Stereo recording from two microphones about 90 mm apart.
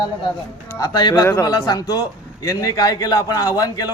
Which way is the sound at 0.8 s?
50° left (ahead or behind).